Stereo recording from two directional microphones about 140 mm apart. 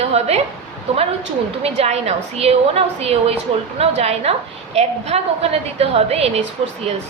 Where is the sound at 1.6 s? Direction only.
50° right (ahead or behind).